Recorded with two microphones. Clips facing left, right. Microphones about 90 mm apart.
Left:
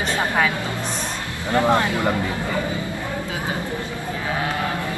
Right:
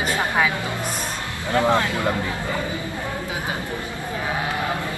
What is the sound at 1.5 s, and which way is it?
Speech, 15° left (ahead or behind).